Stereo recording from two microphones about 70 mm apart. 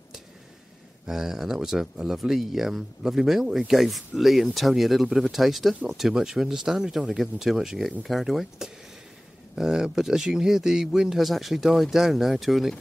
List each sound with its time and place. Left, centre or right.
1.0 s speech: centre